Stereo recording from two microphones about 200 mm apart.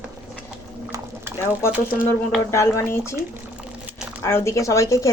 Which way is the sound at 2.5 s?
15° left (ahead or behind).